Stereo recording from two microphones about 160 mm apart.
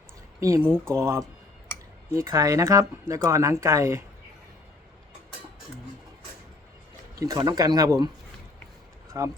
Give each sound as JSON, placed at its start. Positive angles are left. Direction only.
{"t": 0.3, "sound": "speech", "side_deg": -20}
{"t": 7.2, "sound": "speech", "side_deg": -20}
{"t": 9.2, "sound": "speech", "side_deg": -20}